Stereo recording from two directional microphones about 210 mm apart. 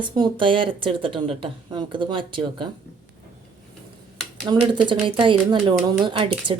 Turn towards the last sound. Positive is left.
turn(degrees=-25)  # may be behind; listen again after turning